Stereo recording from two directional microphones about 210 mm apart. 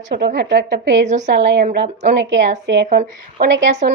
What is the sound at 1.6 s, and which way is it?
Speech, 40° right (ahead or behind).